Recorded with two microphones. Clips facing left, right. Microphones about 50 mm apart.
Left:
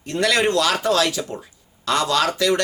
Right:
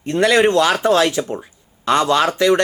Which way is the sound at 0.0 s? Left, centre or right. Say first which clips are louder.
Right 5 dB; right.